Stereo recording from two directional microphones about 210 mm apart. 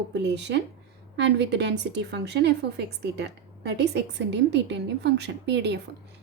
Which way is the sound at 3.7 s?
55° right (ahead or behind).